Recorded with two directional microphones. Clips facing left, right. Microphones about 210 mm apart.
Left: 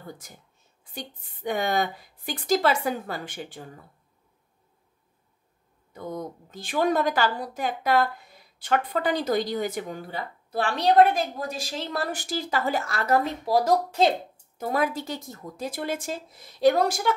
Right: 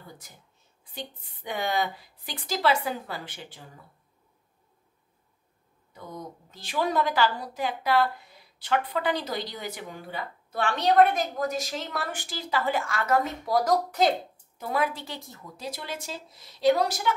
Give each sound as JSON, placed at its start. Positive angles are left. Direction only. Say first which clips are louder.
{"t": 0.9, "sound": "a woman's voice", "louder": "left 1 dB", "side_deg": 45}
{"t": 5.9, "sound": "a woman's voice", "louder": "left 6 dB", "side_deg": 50}
{"t": 14.6, "sound": "a woman's voice", "louder": "left 3 dB", "side_deg": 45}